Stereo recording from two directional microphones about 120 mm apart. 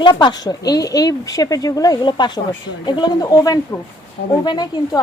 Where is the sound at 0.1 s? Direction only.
35° left (ahead or behind).